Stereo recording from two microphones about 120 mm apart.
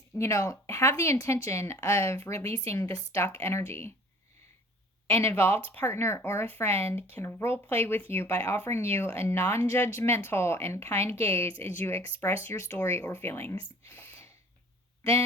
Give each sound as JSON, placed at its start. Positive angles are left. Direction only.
{"t": 0.2, "sound": "speech", "side_deg": 25}
{"t": 5.0, "sound": "speech", "side_deg": 20}